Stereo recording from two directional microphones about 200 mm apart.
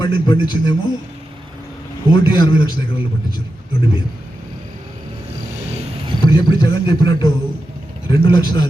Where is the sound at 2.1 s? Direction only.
25° left (ahead or behind).